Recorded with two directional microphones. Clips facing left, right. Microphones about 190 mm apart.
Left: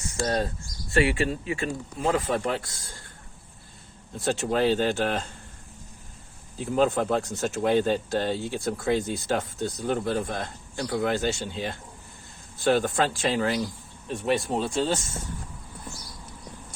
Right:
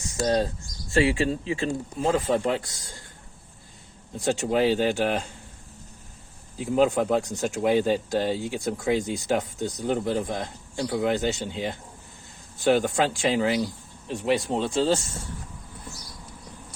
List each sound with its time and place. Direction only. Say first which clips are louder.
0.2 s speech: right 3 dB; 20° right (ahead or behind)
4.2 s speech: right 1 dB; 15° right (ahead or behind)
6.6 s speech: right 2 dB; 15° right (ahead or behind); by 15.0 s 30° right (ahead or behind)